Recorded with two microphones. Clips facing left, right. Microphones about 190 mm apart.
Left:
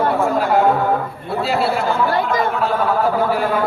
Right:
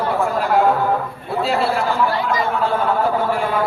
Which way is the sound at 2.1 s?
55° left (ahead or behind).